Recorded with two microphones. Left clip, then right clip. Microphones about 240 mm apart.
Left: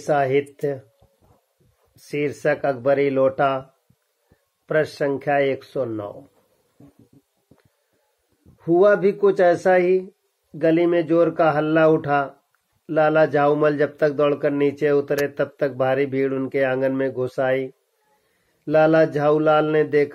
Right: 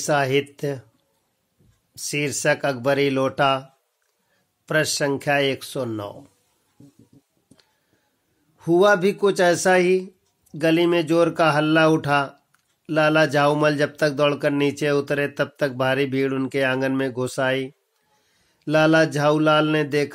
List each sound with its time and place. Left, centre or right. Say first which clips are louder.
0.0 s speech: left 1 dB; right
2.0 s speech: even; right
4.6 s speech: even; right
8.5 s speech: left 1 dB; right
18.7 s speech: left 1 dB; right